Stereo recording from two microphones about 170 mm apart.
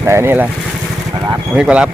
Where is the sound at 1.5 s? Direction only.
5° right (ahead or behind).